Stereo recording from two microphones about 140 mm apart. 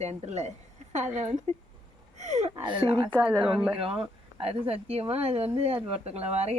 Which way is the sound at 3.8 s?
40° right (ahead or behind).